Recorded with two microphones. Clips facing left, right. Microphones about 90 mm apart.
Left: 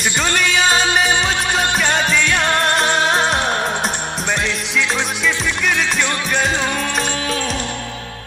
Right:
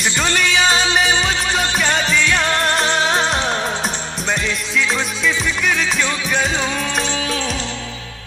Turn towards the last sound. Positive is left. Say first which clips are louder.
# left 1 dB
turn(degrees=0)  # may be behind; listen again after turning